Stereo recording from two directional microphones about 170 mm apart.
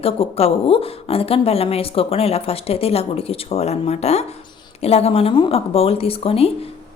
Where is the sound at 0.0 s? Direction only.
35° left (ahead or behind).